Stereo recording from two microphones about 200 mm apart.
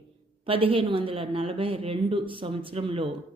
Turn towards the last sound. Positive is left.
turn(degrees=-25)  # may be behind; listen again after turning